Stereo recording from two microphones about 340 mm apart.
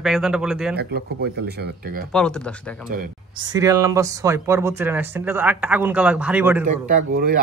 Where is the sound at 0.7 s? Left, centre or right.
Right.